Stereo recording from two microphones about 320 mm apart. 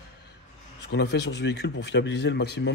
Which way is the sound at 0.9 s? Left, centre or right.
Left.